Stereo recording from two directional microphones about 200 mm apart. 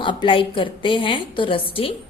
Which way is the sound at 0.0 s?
25° left (ahead or behind).